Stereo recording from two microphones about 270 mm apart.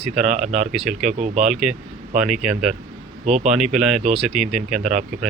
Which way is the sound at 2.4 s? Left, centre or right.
Centre.